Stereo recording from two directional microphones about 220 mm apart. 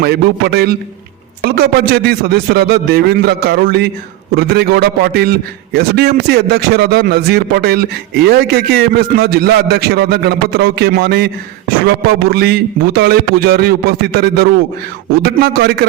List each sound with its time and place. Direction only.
0.0 s a man's voice: 45° right (ahead or behind)